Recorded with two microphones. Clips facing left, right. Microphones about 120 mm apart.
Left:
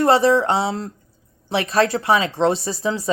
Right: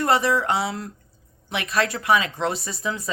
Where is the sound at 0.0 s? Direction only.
30° left (ahead or behind).